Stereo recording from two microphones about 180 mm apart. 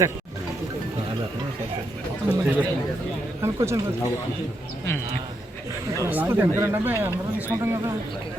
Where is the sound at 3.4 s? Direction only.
15° right (ahead or behind).